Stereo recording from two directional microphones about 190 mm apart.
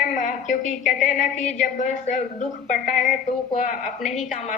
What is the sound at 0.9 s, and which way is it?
Speech, 40° left (ahead or behind).